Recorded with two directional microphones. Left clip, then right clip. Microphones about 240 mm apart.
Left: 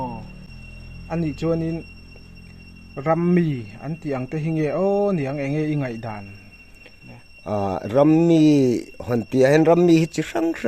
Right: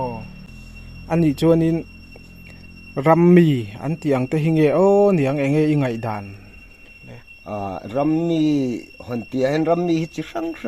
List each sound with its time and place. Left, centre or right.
1.0 s speech: right
2.9 s speech: right
7.4 s speech: left